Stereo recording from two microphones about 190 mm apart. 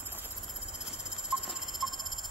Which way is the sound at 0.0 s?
10° right (ahead or behind).